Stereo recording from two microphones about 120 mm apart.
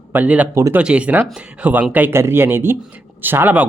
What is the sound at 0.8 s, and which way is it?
Speech, 10° right (ahead or behind).